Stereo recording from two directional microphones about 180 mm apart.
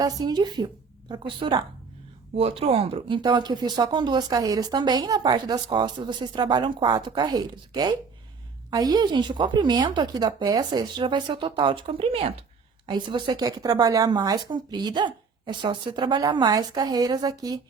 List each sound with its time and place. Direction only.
0.0 s speech: 20° right (ahead or behind)